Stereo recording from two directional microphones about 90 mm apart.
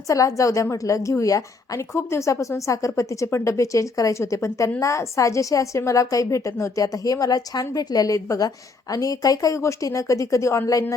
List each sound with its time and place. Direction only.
0.1 s a woman's voice: 35° left (ahead or behind)